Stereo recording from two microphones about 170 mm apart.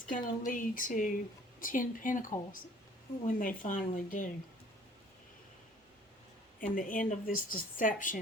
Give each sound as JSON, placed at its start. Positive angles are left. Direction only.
{"t": 0.1, "sound": "a woman's voice", "side_deg": 50}
{"t": 6.6, "sound": "a woman's voice", "side_deg": 55}